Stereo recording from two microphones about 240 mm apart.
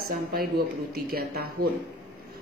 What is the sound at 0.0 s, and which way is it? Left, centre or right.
A woman's voice, right.